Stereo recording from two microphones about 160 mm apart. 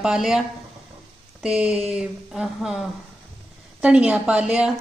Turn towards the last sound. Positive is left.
turn(degrees=-5)  # may be behind; listen again after turning